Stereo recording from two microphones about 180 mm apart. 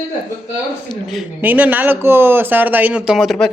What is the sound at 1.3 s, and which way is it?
Speech, 10° right (ahead or behind).